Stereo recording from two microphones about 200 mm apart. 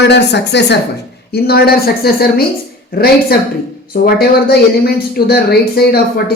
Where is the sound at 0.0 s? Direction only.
60° left (ahead or behind).